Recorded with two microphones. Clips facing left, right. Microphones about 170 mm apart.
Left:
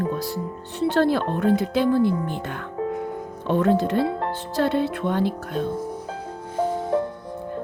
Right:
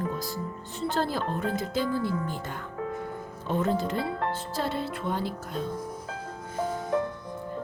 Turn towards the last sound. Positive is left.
turn(degrees=35)  # may be behind; listen again after turning